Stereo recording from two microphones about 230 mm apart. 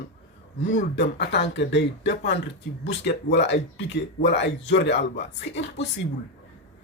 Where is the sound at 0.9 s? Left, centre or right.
Left.